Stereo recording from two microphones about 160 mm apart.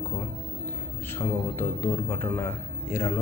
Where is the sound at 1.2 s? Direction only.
15° left (ahead or behind).